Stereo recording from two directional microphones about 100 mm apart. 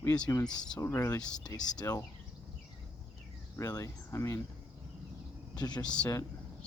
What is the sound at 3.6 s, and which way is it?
Speech, 35° left (ahead or behind).